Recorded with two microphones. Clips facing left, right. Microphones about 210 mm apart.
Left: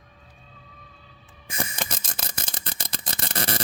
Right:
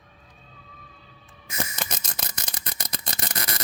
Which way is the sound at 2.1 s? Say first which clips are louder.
Left 1 dB; 30° left (ahead or behind).